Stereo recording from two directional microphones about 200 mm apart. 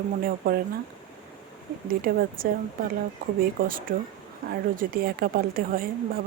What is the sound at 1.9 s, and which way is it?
Speech, 45° right (ahead or behind).